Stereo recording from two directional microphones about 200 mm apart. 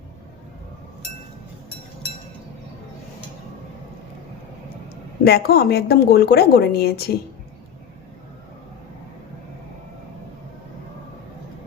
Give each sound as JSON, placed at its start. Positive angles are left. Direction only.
{"t": 5.2, "sound": "speech", "side_deg": 50}